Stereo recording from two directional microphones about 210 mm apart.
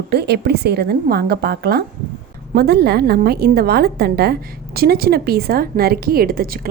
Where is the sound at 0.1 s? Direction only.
50° right (ahead or behind).